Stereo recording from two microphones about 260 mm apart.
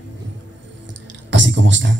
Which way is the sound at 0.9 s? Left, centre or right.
Right.